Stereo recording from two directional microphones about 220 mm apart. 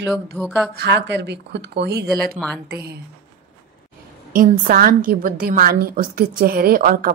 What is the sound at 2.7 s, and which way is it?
Speech, 45° right (ahead or behind).